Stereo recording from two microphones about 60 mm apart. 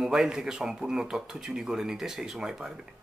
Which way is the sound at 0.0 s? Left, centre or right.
Centre.